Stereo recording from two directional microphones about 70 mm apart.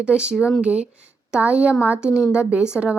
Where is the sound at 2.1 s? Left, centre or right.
Left.